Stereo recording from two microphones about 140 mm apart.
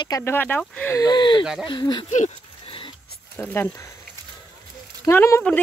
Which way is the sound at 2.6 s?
40° left (ahead or behind).